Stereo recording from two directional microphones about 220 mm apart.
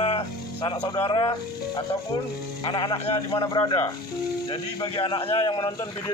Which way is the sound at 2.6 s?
20° left (ahead or behind).